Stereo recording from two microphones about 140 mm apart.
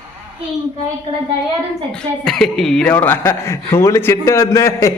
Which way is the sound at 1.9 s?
5° left (ahead or behind).